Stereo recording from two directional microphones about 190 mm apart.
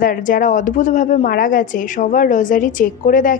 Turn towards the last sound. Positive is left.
turn(degrees=45)  # may be behind; listen again after turning